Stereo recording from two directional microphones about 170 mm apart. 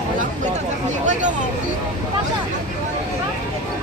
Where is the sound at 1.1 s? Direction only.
45° right (ahead or behind).